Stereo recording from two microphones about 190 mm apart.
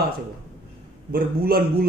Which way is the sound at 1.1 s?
50° right (ahead or behind).